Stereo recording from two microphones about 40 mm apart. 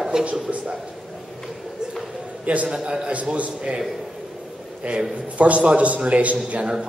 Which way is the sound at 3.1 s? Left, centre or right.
Right.